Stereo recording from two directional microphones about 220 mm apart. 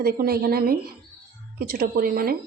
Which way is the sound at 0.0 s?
45° right (ahead or behind).